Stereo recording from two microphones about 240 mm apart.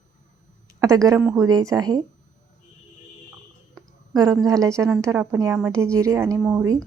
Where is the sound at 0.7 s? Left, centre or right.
Centre.